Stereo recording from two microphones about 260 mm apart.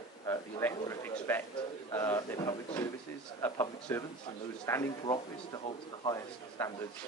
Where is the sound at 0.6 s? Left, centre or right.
Centre.